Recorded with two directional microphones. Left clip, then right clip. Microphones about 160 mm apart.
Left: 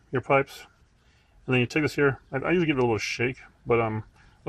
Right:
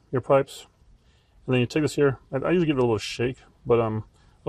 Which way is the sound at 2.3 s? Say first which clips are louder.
Right 1 dB; 50° right (ahead or behind).